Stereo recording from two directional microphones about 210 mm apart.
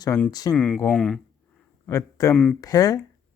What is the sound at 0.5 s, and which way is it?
Speech, 5° left (ahead or behind).